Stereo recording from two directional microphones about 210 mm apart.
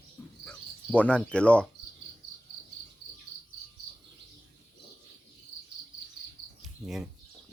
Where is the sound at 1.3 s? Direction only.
5° left (ahead or behind).